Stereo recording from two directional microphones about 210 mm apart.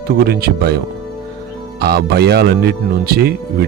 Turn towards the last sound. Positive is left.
turn(degrees=-50)  # may be behind; listen again after turning